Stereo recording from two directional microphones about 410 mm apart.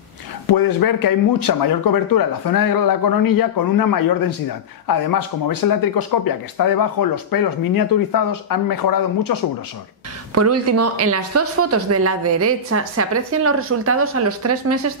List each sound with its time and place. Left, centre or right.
0.5 s speech: left
10.3 s a woman's voice: right